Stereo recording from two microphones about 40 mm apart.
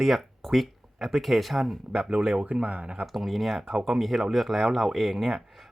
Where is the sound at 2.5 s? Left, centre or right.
Right.